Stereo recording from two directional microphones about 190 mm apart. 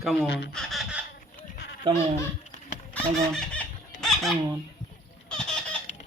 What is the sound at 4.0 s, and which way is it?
Fowl, centre (ahead or behind).